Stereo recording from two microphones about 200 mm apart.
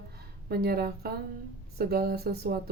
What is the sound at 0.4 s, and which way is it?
Speech, 55° right (ahead or behind).